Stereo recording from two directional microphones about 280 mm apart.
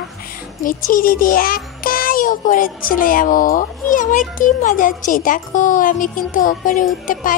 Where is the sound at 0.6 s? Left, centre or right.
Left.